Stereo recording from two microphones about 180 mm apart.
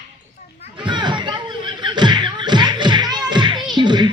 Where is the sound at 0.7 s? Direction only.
25° right (ahead or behind).